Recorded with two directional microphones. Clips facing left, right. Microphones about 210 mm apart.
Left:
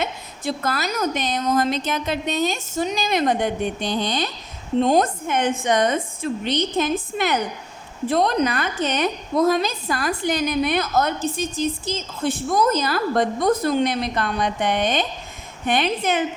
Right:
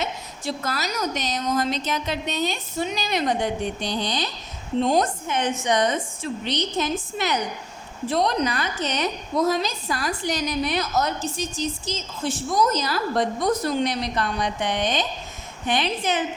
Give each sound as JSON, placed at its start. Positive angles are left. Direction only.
{"t": 0.0, "sound": "a woman's voice", "side_deg": 55}